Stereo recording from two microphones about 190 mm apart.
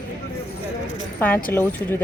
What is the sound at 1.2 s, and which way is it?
Speech, 10° left (ahead or behind).